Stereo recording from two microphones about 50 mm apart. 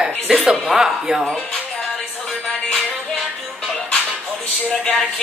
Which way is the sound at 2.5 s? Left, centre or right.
Centre.